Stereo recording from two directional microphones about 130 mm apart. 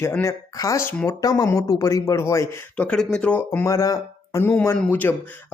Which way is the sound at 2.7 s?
10° left (ahead or behind).